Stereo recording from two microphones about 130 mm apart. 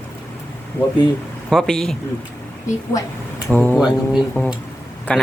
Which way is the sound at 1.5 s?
5° left (ahead or behind).